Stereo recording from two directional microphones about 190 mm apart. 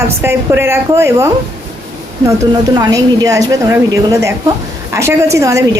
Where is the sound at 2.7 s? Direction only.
20° right (ahead or behind).